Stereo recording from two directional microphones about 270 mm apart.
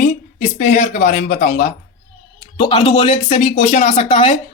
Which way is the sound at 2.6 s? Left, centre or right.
Centre.